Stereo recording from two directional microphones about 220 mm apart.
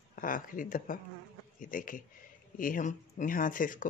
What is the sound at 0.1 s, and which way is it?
Speech, 40° left (ahead or behind).